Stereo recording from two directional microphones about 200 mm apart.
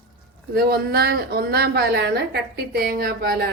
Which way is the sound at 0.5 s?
50° right (ahead or behind).